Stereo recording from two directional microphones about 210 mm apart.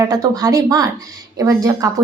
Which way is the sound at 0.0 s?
15° right (ahead or behind).